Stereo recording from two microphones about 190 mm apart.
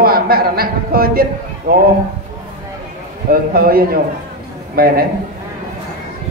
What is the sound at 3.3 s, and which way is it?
A man's voice, 50° right (ahead or behind).